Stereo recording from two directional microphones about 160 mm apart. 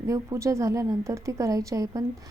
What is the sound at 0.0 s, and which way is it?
A woman's voice, 20° right (ahead or behind).